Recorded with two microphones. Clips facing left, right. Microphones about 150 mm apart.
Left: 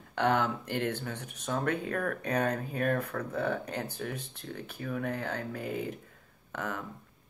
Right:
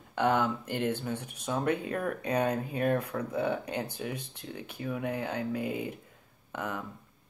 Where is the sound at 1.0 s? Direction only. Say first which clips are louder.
Right 3 dB; 10° right (ahead or behind).